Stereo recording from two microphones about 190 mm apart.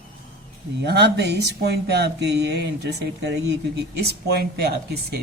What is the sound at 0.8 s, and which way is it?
A man's voice, 60° right (ahead or behind).